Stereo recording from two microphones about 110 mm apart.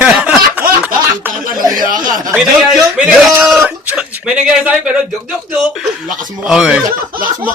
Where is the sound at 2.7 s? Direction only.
Centre (ahead or behind).